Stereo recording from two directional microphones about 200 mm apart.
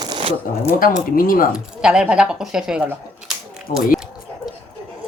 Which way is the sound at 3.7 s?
40° left (ahead or behind).